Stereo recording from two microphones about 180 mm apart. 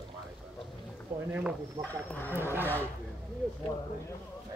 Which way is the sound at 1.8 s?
10° left (ahead or behind).